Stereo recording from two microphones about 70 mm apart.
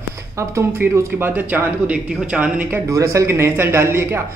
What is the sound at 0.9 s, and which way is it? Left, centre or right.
Speech, right.